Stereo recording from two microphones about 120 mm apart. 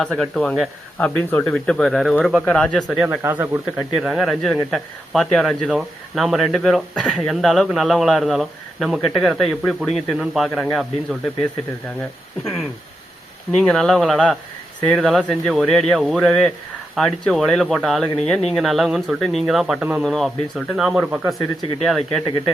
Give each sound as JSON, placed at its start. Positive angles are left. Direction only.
{"t": 0.0, "sound": "speech", "side_deg": 5}
{"t": 3.2, "sound": "speech", "side_deg": -20}
{"t": 3.8, "sound": "speech", "side_deg": 0}
{"t": 13.5, "sound": "speech", "side_deg": 5}
{"t": 21.8, "sound": "speech", "side_deg": 5}